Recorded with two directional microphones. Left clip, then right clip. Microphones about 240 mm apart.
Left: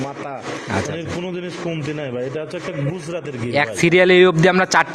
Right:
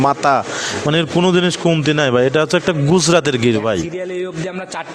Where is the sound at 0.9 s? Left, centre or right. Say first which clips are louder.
Right 12 dB; right.